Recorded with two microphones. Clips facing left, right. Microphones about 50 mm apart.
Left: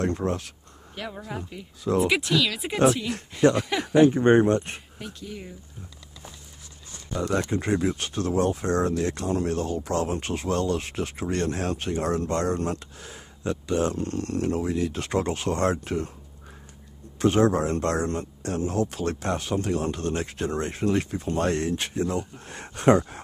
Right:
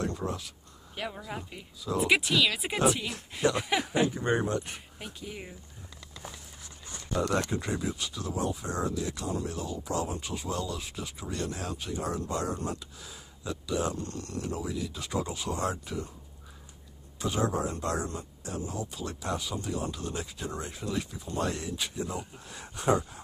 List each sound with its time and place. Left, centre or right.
0.0 s speech: left
1.0 s speech: centre
4.0 s speech: left
4.9 s speech: centre
7.2 s speech: centre
7.5 s speech: left
17.2 s speech: left